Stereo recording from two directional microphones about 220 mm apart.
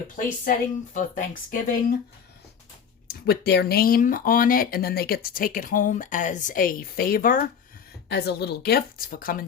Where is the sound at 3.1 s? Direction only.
45° left (ahead or behind).